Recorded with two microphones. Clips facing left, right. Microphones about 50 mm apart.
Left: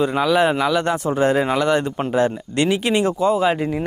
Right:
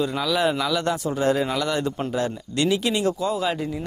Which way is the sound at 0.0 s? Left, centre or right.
Left.